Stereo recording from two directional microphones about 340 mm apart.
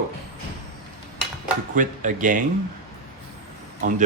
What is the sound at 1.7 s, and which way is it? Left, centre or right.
Speech, right.